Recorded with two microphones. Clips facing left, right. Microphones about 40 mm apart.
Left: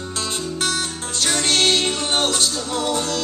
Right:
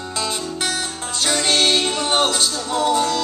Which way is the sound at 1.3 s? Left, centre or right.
Right.